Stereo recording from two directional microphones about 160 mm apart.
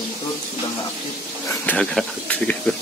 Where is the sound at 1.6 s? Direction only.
10° left (ahead or behind).